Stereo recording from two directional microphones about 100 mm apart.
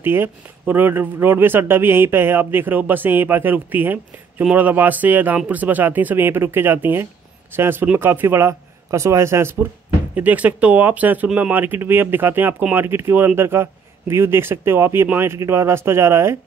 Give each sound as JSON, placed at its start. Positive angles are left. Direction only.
{"t": 0.0, "sound": "speech", "side_deg": -20}